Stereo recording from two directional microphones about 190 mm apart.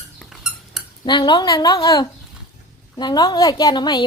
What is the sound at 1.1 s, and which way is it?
A woman's voice, 25° left (ahead or behind).